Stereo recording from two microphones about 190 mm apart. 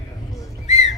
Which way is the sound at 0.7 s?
40° left (ahead or behind).